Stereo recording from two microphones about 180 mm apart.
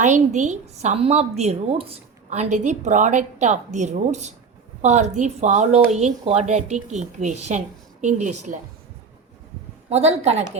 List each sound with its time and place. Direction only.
0.0 s a woman's voice: 40° right (ahead or behind)
9.9 s a woman's voice: 35° right (ahead or behind)